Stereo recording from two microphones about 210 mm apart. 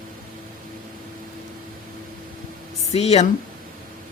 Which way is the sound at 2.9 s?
30° left (ahead or behind).